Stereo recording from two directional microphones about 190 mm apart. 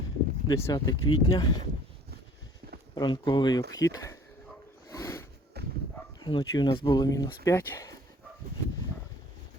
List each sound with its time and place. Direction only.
0.4 s speech: 15° left (ahead or behind)
2.9 s speech: 25° left (ahead or behind)
4.9 s a sound: 15° left (ahead or behind)
5.6 s dog: 60° right (ahead or behind)
6.1 s speech: 20° left (ahead or behind)